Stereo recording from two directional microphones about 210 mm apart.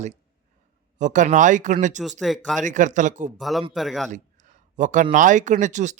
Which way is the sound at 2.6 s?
35° right (ahead or behind).